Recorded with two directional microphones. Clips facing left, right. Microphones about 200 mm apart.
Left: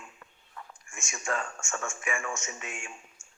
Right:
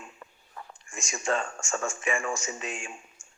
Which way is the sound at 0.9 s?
35° right (ahead or behind).